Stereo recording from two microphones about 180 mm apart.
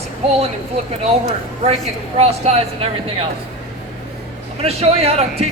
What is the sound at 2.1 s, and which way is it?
A man's voice, 35° right (ahead or behind).